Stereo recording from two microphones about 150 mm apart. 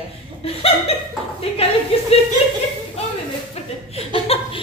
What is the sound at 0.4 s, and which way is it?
Speech, 40° left (ahead or behind).